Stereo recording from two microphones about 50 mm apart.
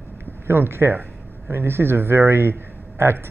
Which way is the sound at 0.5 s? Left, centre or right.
Right.